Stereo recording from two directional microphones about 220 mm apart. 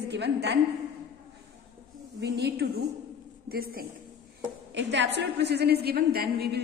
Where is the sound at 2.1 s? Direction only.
50° right (ahead or behind).